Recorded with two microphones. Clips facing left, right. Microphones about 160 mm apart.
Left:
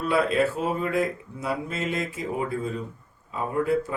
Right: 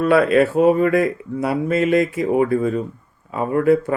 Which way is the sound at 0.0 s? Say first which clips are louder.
Right 8 dB; 65° right (ahead or behind).